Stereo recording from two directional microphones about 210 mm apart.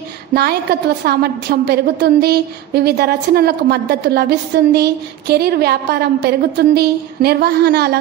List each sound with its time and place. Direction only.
0.3 s a woman's voice: 50° right (ahead or behind)